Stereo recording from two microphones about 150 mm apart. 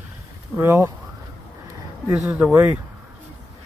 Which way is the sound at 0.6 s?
15° right (ahead or behind).